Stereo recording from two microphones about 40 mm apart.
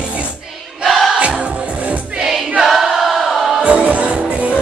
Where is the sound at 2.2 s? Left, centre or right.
Centre.